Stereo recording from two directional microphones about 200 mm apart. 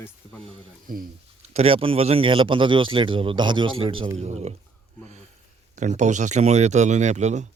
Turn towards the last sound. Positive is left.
turn(degrees=-35)  # may be behind; listen again after turning